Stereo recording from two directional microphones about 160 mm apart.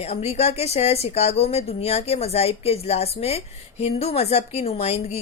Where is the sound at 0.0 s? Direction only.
40° left (ahead or behind).